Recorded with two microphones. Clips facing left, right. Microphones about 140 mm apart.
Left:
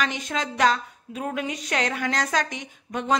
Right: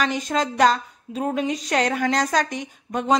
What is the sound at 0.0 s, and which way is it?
A woman's voice, 40° right (ahead or behind).